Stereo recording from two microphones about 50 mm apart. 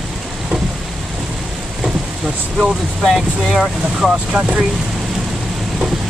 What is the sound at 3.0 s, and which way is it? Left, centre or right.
Speech, centre.